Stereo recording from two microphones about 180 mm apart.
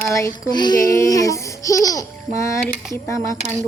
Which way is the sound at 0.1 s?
15° left (ahead or behind).